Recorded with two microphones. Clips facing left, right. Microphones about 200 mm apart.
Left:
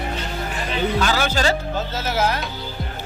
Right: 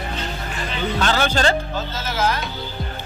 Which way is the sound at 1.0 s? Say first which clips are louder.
Right 5 dB; 10° left (ahead or behind).